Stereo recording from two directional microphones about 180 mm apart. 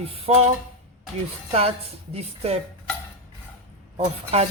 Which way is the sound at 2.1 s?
35° right (ahead or behind).